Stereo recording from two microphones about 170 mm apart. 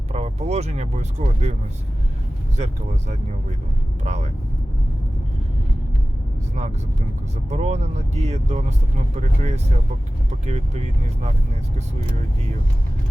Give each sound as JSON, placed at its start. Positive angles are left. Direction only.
{"t": 0.1, "sound": "speech", "side_deg": -40}
{"t": 4.0, "sound": "speech", "side_deg": -40}
{"t": 7.5, "sound": "speech", "side_deg": -40}